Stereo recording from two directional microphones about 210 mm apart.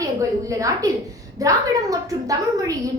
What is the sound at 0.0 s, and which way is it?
A woman's voice, 15° right (ahead or behind).